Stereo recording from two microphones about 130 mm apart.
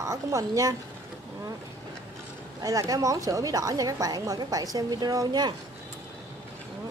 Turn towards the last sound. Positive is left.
turn(degrees=-30)  # may be behind; listen again after turning